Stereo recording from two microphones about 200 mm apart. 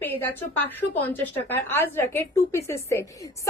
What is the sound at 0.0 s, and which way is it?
A woman's voice, 10° left (ahead or behind).